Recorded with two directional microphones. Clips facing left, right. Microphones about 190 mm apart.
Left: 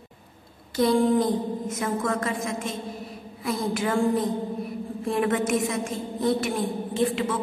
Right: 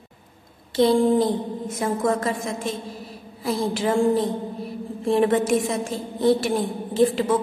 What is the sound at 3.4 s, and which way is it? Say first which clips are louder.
A woman's voice: right 3 dB; 30° right (ahead or behind).